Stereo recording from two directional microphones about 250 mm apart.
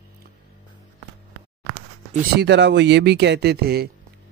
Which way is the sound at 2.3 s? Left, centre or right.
Right.